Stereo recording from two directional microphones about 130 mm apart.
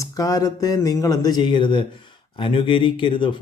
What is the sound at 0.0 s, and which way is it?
Speech, 25° left (ahead or behind).